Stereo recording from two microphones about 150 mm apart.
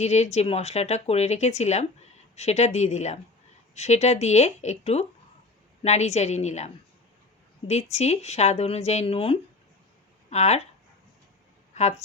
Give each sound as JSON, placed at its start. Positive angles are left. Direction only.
{"t": 0.0, "sound": "speech", "side_deg": 45}
{"t": 7.7, "sound": "speech", "side_deg": 45}
{"t": 11.7, "sound": "a sound", "side_deg": 50}